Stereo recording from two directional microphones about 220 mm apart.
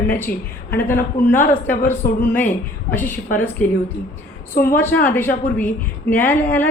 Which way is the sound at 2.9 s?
10° left (ahead or behind).